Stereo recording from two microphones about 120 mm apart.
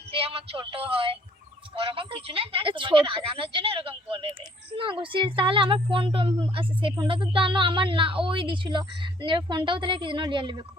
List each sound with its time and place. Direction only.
0.1 s a woman's voice: 50° right (ahead or behind)